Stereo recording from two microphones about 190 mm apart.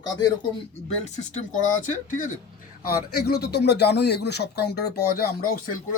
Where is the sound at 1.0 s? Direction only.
35° left (ahead or behind).